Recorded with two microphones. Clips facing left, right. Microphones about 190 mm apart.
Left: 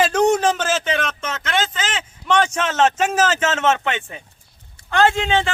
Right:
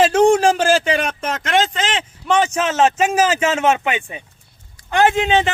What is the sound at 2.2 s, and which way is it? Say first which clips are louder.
A man's voice: right 2 dB; 5° right (ahead or behind).